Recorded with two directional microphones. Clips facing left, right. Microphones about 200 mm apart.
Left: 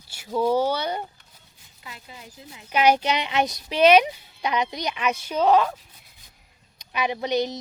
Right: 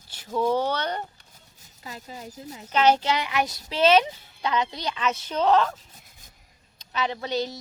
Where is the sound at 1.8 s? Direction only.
40° right (ahead or behind).